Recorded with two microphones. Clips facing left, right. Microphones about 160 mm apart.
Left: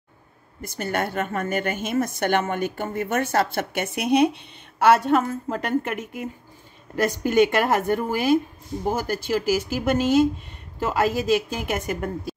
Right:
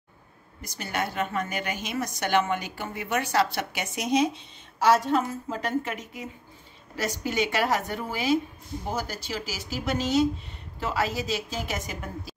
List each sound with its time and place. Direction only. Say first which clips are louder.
0.6 s a woman's voice: left 5 dB; 55° left (ahead or behind)